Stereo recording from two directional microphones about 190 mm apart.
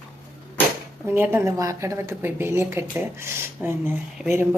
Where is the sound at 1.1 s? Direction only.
10° right (ahead or behind).